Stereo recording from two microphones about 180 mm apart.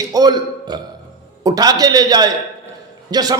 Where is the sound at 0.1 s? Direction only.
20° right (ahead or behind).